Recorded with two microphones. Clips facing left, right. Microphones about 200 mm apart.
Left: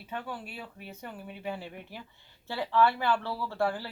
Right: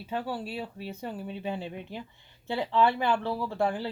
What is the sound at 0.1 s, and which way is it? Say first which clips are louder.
Speech: right 6 dB; 35° right (ahead or behind).